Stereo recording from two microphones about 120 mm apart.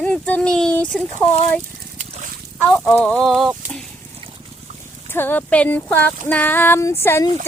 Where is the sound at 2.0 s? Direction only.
90° right.